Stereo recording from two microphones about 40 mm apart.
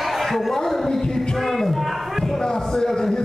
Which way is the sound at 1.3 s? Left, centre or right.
Centre.